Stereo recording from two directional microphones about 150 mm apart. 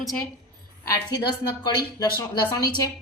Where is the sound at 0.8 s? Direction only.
25° left (ahead or behind).